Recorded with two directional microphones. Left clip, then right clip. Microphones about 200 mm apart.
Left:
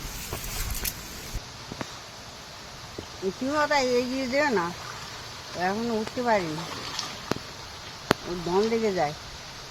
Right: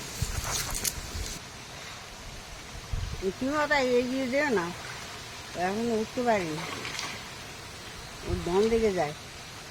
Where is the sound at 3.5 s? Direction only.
15° left (ahead or behind).